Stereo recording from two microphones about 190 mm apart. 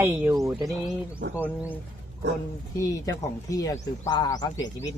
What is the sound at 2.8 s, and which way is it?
Speech, 20° left (ahead or behind).